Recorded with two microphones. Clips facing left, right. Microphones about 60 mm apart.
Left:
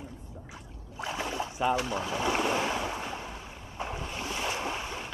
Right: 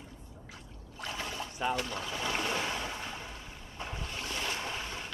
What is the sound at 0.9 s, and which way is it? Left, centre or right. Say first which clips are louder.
Boat: left 5 dB; centre.